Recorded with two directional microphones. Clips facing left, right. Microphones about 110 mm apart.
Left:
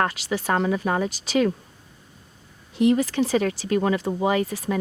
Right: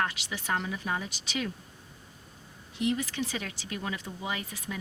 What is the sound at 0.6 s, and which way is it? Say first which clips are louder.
Speech: left 11 dB; 55° left (ahead or behind).